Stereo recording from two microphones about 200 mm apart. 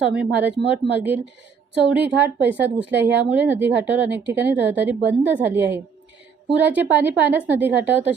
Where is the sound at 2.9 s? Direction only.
60° right (ahead or behind).